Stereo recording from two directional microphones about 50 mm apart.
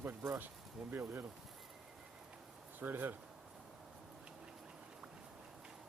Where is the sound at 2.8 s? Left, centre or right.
Right.